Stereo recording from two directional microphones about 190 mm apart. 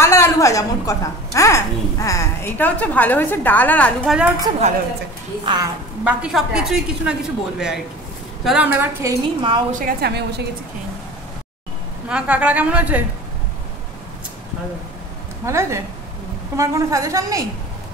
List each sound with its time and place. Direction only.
0.0 s a woman's voice: 15° left (ahead or behind)
5.4 s speech: 25° right (ahead or behind)
6.0 s a woman's voice: 5° right (ahead or behind); by 9.6 s 20° right (ahead or behind)
9.7 s a woman's voice: 45° right (ahead or behind)
12.1 s a woman's voice: 5° right (ahead or behind)
15.4 s a woman's voice: 15° right (ahead or behind)